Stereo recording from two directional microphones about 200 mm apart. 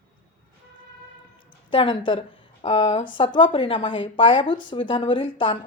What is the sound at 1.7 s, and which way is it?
A woman's voice, 25° left (ahead or behind).